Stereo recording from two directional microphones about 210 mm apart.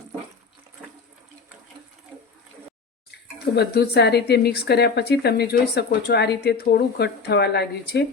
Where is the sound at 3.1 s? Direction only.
50° left (ahead or behind).